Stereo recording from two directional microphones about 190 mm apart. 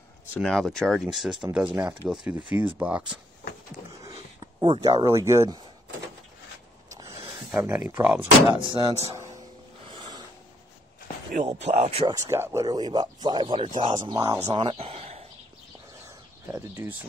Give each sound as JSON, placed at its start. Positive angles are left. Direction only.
{"t": 0.3, "sound": "speech", "side_deg": 0}
{"t": 1.8, "sound": "speech", "side_deg": -15}
{"t": 2.0, "sound": "speech", "side_deg": -5}
{"t": 4.0, "sound": "a sound", "side_deg": -25}
{"t": 5.0, "sound": "speech", "side_deg": -15}
{"t": 6.9, "sound": "a sound", "side_deg": -15}
{"t": 7.5, "sound": "speech", "side_deg": -10}
{"t": 8.5, "sound": "speech", "side_deg": -30}
{"t": 9.8, "sound": "music", "side_deg": -25}
{"t": 11.5, "sound": "speech", "side_deg": -35}
{"t": 12.1, "sound": "speech", "side_deg": -15}
{"t": 14.5, "sound": "a sound", "side_deg": -25}
{"t": 16.5, "sound": "speech", "side_deg": -15}